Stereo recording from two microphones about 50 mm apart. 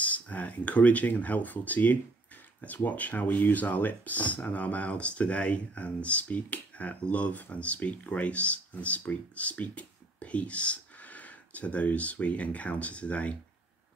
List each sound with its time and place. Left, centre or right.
0.0 s speech: left